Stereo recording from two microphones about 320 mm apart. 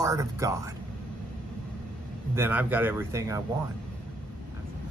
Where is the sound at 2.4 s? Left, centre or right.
Centre.